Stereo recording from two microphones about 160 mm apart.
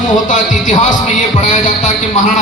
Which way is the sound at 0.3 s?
50° left (ahead or behind).